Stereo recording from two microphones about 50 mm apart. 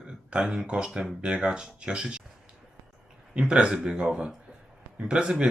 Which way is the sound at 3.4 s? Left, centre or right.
Centre.